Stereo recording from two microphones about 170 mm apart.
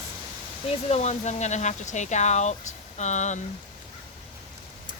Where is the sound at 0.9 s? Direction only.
40° left (ahead or behind).